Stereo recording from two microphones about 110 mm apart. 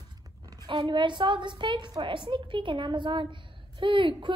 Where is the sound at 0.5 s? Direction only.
40° right (ahead or behind).